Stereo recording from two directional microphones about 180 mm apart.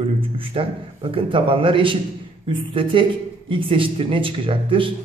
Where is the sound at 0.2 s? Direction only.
30° right (ahead or behind).